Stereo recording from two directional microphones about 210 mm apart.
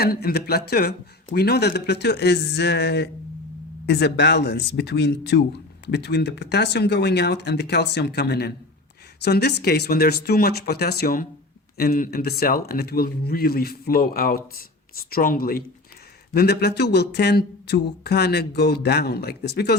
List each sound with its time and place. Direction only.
0.0 s speech: 45° left (ahead or behind)